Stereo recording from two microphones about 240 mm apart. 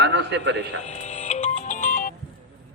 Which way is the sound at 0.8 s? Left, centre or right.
Left.